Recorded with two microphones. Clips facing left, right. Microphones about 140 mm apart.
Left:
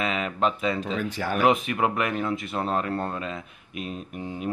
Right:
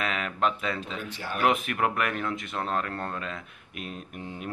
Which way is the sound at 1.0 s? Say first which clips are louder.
Left 7 dB; 50° left (ahead or behind).